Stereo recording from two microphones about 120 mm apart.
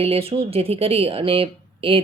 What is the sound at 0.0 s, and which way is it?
Speech, 55° right (ahead or behind).